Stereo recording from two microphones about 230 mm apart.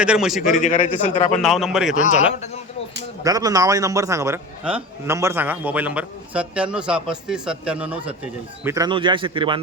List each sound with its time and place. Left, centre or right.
0.0 s a man's voice: centre
0.5 s a man's voice: left
1.3 s a man's voice: centre
2.0 s speech: left
3.2 s a man's voice: centre